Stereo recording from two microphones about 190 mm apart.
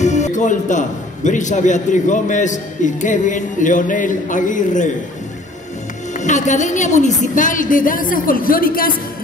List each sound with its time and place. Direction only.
0.0 s a man's voice: 40° left (ahead or behind)
6.1 s a woman's voice: 40° left (ahead or behind)